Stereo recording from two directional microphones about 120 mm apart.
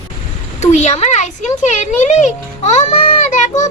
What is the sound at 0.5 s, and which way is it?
A child's voice, 75° left (ahead or behind).